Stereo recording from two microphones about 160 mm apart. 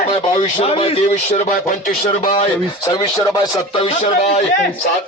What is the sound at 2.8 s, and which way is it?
A man's voice, 25° left (ahead or behind).